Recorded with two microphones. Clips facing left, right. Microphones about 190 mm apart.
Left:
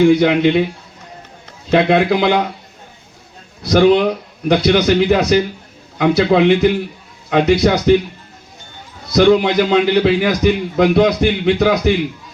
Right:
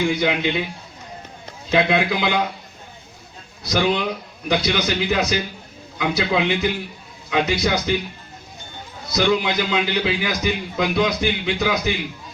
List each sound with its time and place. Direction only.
0.0 s a man's voice: 55° left (ahead or behind)
1.7 s a man's voice: 55° left (ahead or behind)
3.6 s a man's voice: 55° left (ahead or behind)
9.1 s a man's voice: 55° left (ahead or behind)